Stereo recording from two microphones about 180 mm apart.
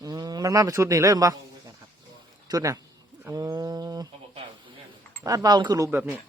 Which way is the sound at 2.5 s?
20° right (ahead or behind).